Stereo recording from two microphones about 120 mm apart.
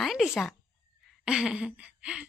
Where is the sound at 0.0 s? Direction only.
Centre (ahead or behind).